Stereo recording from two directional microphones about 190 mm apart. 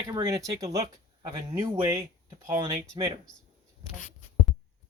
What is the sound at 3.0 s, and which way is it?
Speech, 25° right (ahead or behind).